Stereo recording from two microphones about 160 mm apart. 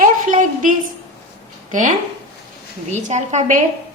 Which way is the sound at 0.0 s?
55° right (ahead or behind).